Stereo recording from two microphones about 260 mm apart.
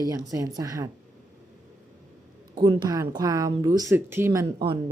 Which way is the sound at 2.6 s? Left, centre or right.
Centre.